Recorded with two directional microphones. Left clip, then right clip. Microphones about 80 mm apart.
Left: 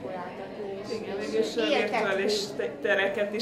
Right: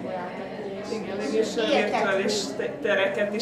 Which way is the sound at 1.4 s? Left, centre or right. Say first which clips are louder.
Right 2 dB; right.